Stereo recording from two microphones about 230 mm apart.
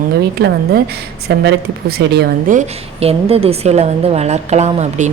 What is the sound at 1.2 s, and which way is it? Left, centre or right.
A woman's voice, right.